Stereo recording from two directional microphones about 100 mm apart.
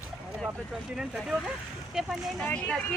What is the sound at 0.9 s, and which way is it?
Speech, 5° right (ahead or behind).